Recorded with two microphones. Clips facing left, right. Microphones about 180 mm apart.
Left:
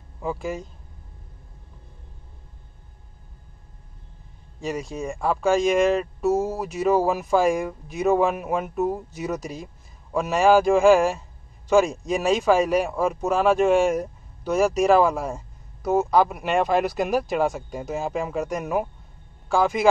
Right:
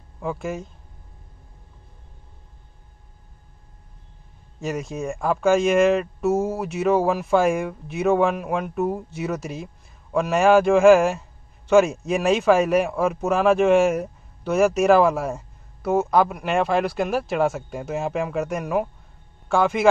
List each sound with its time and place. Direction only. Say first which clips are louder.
0.2 s speech: even; 5° left (ahead or behind)
4.9 s speech: right 1 dB; centre (ahead or behind)